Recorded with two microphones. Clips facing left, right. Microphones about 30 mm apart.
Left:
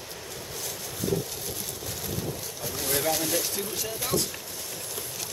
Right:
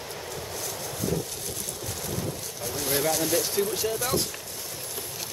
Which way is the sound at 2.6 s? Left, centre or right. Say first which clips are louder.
Right 1 dB; centre.